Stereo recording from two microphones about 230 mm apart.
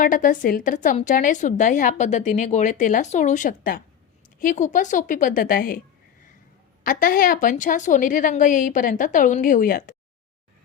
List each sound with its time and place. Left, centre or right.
0.0 s a woman's voice: left
6.8 s a woman's voice: left